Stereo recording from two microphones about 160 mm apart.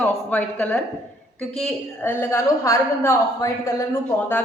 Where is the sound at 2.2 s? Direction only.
15° left (ahead or behind).